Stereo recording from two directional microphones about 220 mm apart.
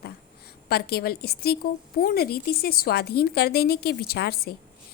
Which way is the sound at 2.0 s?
45° left (ahead or behind).